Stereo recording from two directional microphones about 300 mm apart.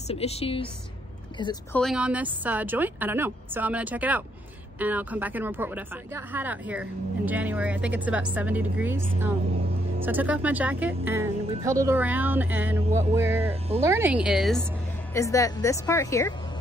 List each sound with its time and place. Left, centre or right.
0.1 s a woman's voice: centre
1.8 s speech: centre
15.1 s a woman's voice: centre